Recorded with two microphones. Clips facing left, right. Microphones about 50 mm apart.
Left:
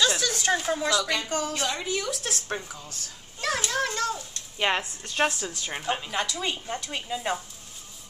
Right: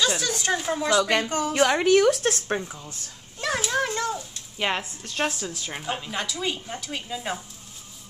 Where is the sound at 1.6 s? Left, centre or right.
Right.